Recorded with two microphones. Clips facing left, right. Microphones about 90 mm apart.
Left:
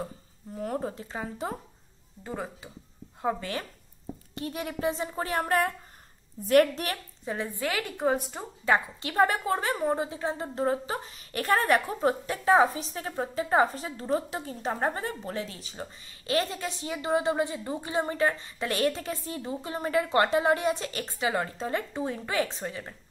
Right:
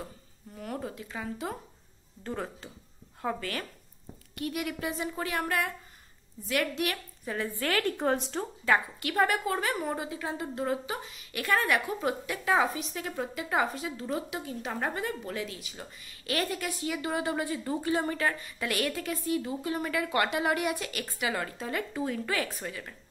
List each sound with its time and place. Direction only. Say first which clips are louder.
0.6 s a woman's voice: left 5 dB; 30° left (ahead or behind)
2.2 s a woman's voice: even; 10° left (ahead or behind); by 7.3 s 35° left (ahead or behind)
7.3 s a woman's voice: right 1 dB; 20° left (ahead or behind)
8.6 s a woman's voice: left 2 dB; 25° left (ahead or behind)